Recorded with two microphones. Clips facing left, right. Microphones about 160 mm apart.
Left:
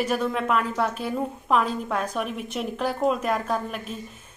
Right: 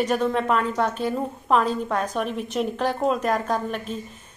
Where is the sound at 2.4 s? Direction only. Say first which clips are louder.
Right 5 dB; 35° right (ahead or behind).